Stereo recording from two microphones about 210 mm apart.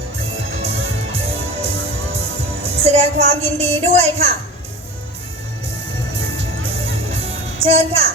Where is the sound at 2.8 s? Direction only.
30° right (ahead or behind).